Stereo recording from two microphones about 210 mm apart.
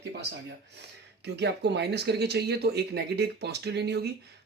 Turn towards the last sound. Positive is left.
turn(degrees=-50)  # may be behind; listen again after turning